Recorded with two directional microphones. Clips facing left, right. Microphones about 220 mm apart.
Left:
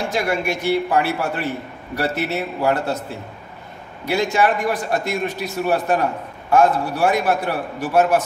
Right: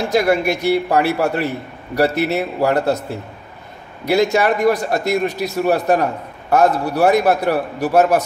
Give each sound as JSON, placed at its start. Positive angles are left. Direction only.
{"t": 0.1, "sound": "a man's voice", "side_deg": -40}
{"t": 4.0, "sound": "a man's voice", "side_deg": -40}